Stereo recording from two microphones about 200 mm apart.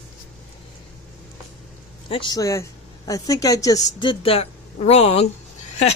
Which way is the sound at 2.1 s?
20° left (ahead or behind).